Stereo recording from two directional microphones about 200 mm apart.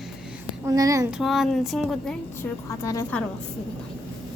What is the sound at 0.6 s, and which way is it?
Speech, 15° right (ahead or behind).